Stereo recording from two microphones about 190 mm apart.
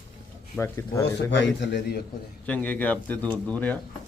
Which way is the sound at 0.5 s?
10° left (ahead or behind).